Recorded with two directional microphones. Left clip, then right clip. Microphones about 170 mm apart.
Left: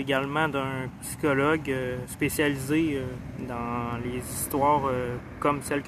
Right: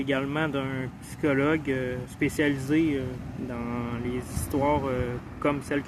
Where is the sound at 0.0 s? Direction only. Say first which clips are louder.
Left 2 dB; 15° right (ahead or behind).